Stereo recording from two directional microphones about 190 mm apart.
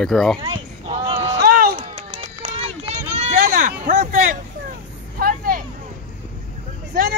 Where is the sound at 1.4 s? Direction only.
50° right (ahead or behind).